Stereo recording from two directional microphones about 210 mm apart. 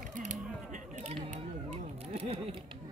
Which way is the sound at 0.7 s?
35° right (ahead or behind).